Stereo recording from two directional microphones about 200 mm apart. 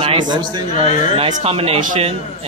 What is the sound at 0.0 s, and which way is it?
A man's voice, 25° right (ahead or behind).